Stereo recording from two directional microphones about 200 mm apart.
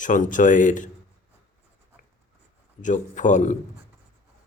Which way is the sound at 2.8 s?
40° left (ahead or behind).